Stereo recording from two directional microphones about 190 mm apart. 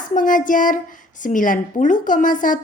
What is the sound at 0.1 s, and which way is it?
A woman's voice, 45° left (ahead or behind).